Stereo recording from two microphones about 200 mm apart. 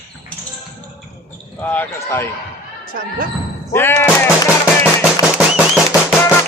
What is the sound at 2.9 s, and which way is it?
Speech, 45° right (ahead or behind).